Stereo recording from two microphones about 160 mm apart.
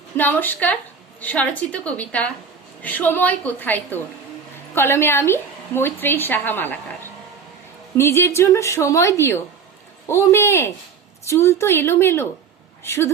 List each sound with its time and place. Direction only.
0.2 s a woman's voice: 10° left (ahead or behind)